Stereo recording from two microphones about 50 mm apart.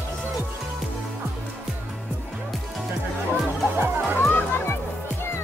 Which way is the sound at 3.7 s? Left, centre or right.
Right.